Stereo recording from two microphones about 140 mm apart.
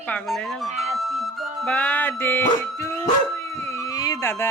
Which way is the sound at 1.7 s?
10° left (ahead or behind).